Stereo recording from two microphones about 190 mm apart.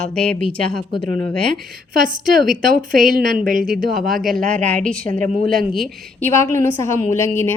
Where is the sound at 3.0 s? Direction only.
Centre (ahead or behind).